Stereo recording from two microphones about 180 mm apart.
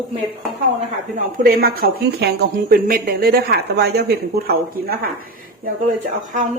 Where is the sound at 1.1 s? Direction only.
50° right (ahead or behind).